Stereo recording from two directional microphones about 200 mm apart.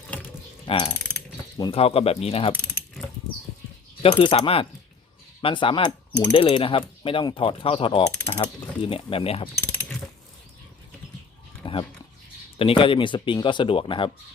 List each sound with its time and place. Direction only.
0.6 s mechanisms: 25° left (ahead or behind)
1.5 s speech: 25° left (ahead or behind)
4.0 s speech: 25° left (ahead or behind)
11.6 s a sound: 25° left (ahead or behind)
12.5 s speech: 25° left (ahead or behind)